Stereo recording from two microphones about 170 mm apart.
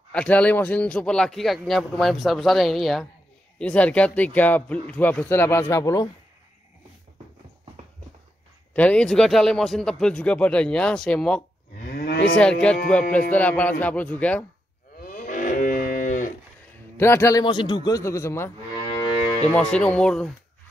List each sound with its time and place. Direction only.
0.1 s a man's voice: 5° left (ahead or behind)
8.7 s a man's voice: 5° left (ahead or behind)
11.9 s moo: 70° left (ahead or behind)
12.4 s a man's voice: 5° left (ahead or behind)
15.0 s moo: 55° left (ahead or behind)
16.9 s a man's voice: 15° left (ahead or behind)
19.7 s a man's voice: 5° left (ahead or behind)